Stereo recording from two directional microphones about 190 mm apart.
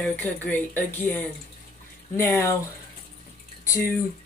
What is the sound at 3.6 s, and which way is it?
Speech, 15° left (ahead or behind).